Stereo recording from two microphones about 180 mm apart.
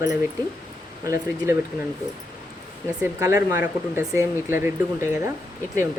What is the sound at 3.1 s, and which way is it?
Speech, 15° right (ahead or behind).